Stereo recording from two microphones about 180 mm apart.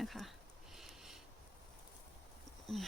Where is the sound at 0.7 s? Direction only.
Centre (ahead or behind).